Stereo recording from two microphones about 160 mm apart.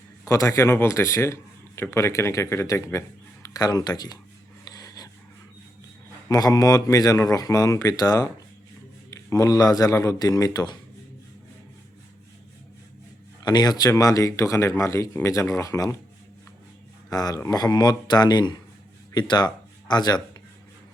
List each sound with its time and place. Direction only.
0.3 s a man's voice: 20° left (ahead or behind)
4.7 s a sound: 25° left (ahead or behind)
6.2 s speech: 20° left (ahead or behind)
13.4 s speech: 25° left (ahead or behind)
17.1 s speech: 25° left (ahead or behind)